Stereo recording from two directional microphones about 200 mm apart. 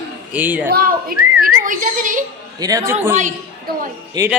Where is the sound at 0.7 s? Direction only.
45° right (ahead or behind).